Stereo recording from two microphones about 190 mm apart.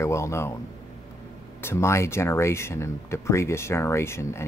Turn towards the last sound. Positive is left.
turn(degrees=15)  # may be behind; listen again after turning